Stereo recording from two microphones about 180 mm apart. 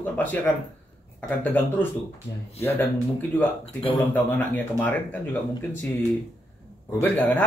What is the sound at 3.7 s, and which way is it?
Speech, 30° left (ahead or behind).